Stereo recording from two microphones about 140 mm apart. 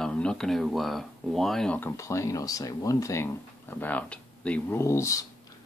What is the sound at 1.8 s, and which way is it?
Speech, 20° left (ahead or behind).